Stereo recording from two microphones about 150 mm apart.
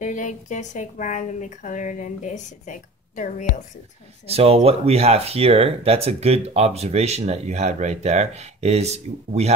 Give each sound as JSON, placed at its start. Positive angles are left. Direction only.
{"t": 0.0, "sound": "speech", "side_deg": 55}
{"t": 4.3, "sound": "speech", "side_deg": -40}